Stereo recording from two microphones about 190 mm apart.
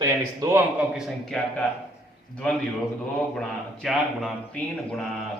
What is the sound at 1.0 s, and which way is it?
Speech, centre (ahead or behind).